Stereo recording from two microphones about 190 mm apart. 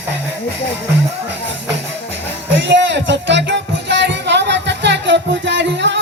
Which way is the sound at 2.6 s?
70° right (ahead or behind).